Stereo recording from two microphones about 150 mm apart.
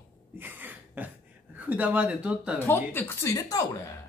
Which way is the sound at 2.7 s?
15° left (ahead or behind).